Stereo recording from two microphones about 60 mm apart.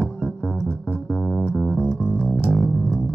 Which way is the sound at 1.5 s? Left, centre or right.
Centre.